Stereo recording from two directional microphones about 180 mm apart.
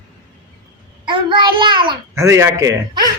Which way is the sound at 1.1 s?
25° right (ahead or behind).